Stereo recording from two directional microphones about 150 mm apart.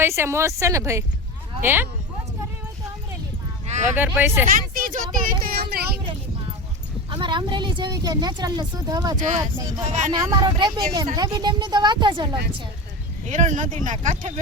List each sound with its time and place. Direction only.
0.0 s speech: 15° right (ahead or behind)
3.9 s speech: 15° right (ahead or behind)
4.4 s speech: 65° right (ahead or behind)
5.2 s speech: 80° right
7.1 s speech: 30° right (ahead or behind)
13.2 s speech: 55° right (ahead or behind)